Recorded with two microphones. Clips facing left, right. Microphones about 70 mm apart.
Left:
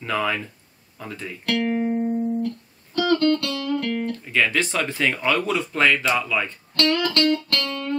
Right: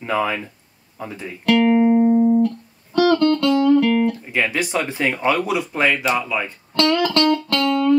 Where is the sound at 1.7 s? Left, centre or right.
Right.